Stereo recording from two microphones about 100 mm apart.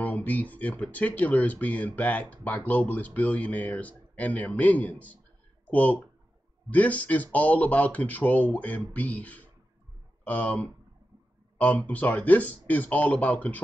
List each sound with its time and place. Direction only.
0.0 s speech: 15° left (ahead or behind)